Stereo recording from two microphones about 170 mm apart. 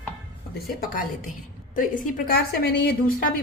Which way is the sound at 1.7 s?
55° left (ahead or behind).